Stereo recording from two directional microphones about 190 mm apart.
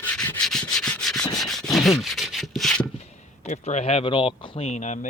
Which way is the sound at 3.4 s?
35° left (ahead or behind).